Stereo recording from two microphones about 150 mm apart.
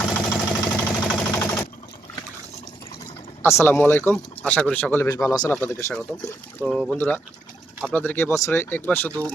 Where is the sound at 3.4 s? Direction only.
15° left (ahead or behind).